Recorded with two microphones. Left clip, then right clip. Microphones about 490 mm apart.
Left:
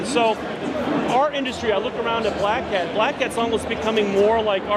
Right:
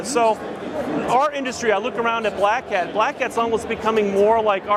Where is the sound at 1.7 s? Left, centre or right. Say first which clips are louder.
Right 3 dB; right.